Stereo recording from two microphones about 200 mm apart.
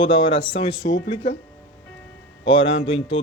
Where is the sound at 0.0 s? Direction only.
25° left (ahead or behind).